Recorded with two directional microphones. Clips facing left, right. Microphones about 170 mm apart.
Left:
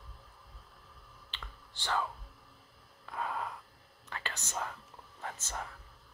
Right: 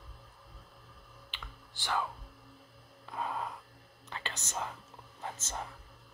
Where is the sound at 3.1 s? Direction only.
20° right (ahead or behind).